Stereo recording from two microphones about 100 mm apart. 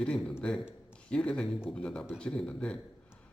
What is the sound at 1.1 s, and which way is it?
Speech, 10° left (ahead or behind).